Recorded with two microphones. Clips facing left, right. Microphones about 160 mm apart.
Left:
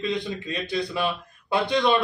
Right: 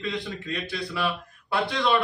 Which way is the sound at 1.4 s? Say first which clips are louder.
Left 4 dB; 20° left (ahead or behind).